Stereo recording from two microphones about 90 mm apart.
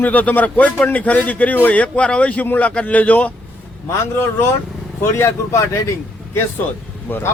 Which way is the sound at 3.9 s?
25° left (ahead or behind).